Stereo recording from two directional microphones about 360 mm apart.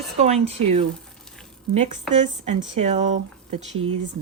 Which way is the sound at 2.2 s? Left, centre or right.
Centre.